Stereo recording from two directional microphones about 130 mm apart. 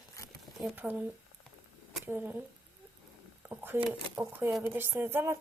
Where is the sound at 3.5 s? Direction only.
15° right (ahead or behind).